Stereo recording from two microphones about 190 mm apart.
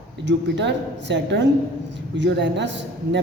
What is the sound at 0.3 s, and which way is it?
A woman's voice, 65° right (ahead or behind).